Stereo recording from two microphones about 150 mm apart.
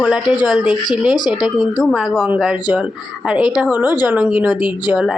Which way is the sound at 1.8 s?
Centre (ahead or behind).